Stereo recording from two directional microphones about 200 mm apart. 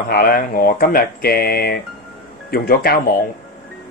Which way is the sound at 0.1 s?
45° left (ahead or behind).